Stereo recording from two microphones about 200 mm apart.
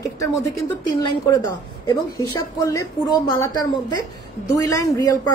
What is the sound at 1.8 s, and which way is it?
A woman's voice, 15° left (ahead or behind).